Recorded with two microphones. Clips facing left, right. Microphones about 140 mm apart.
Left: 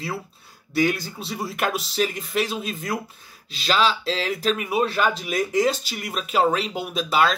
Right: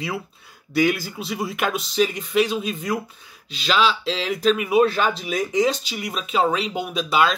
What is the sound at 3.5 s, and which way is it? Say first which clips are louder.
Speech: right 1 dB; 40° left (ahead or behind).